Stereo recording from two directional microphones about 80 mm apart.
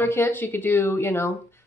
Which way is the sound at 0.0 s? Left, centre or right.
Left.